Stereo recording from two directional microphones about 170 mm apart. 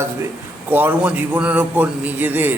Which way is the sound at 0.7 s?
10° right (ahead or behind).